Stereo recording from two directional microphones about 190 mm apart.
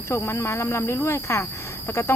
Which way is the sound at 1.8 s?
10° left (ahead or behind).